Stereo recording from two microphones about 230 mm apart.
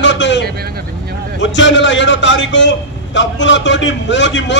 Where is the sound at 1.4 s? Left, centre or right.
Left.